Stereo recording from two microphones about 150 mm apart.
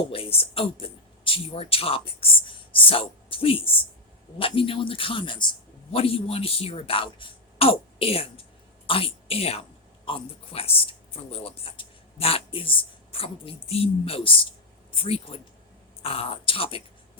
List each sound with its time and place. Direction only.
0.1 s a woman's voice: 40° left (ahead or behind)